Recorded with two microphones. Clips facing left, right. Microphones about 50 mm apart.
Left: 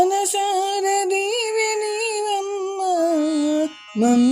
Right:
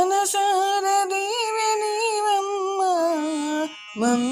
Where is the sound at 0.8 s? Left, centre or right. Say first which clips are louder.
Left 2 dB; centre.